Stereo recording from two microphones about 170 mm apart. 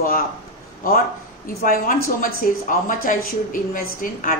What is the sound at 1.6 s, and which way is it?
A woman's voice, 55° left (ahead or behind).